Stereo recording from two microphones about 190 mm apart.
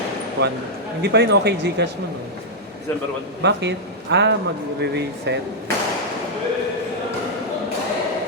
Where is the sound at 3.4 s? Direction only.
65° right (ahead or behind).